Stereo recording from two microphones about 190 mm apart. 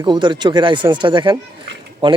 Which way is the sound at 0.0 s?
25° right (ahead or behind).